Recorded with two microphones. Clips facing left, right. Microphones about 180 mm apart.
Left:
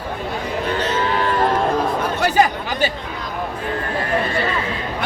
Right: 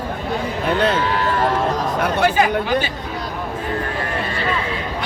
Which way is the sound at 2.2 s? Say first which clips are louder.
Even; 40° left (ahead or behind).